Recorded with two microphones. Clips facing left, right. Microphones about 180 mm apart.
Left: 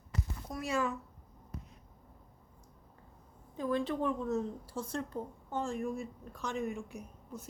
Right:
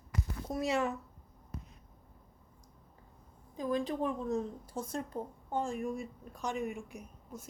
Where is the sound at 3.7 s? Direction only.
15° right (ahead or behind).